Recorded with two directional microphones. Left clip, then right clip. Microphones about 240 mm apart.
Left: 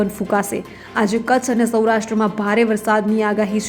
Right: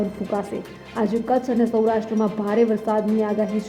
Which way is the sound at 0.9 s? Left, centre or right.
Centre.